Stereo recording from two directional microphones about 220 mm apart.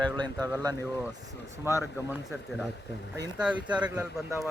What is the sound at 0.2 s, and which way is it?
Speech, 15° right (ahead or behind).